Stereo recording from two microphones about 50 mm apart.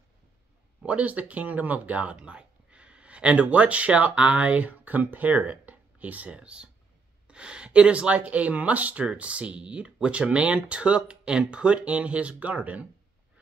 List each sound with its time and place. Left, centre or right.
0.8 s speech: right